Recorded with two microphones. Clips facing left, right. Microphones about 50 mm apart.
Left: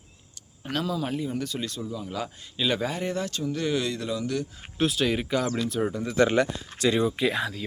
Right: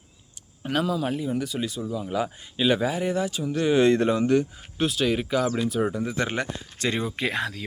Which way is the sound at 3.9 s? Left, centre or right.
Right.